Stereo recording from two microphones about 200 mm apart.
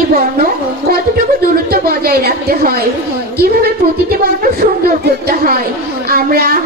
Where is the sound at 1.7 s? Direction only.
50° right (ahead or behind).